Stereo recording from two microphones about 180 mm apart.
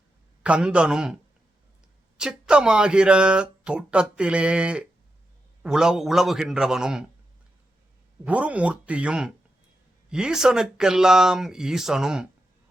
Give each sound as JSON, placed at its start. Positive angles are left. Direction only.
{"t": 0.4, "sound": "speech", "side_deg": -5}
{"t": 8.2, "sound": "speech", "side_deg": -5}